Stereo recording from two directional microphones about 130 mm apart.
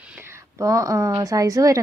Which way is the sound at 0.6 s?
25° right (ahead or behind).